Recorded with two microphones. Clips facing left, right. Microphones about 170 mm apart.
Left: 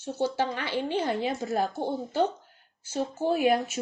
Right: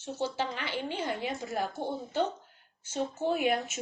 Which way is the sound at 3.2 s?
35° left (ahead or behind).